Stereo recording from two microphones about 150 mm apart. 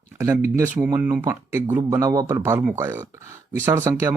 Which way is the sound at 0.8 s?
5° right (ahead or behind).